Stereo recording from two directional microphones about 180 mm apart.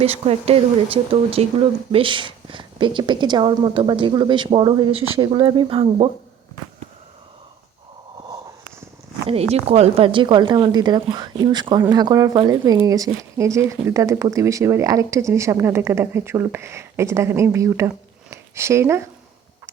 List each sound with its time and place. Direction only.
0.0 s a woman's voice: 35° right (ahead or behind)
9.2 s a woman's voice: 35° right (ahead or behind); by 19.0 s 15° right (ahead or behind)